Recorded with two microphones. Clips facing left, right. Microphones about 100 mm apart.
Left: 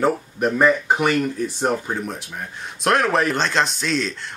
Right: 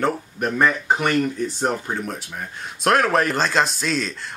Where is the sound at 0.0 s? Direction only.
5° left (ahead or behind).